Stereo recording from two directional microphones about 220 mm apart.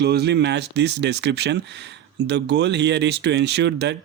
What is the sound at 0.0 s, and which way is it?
Speech, 50° right (ahead or behind).